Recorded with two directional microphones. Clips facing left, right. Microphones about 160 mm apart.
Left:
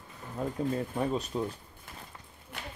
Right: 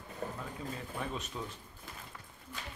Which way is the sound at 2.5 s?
65° left (ahead or behind).